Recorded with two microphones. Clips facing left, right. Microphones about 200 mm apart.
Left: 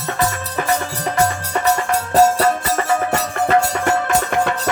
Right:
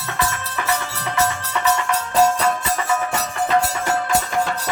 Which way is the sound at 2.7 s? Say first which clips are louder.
Left 4 dB; 55° left (ahead or behind).